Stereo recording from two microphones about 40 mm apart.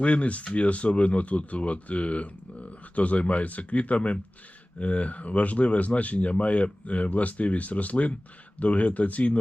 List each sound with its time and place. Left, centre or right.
0.0 s speech: left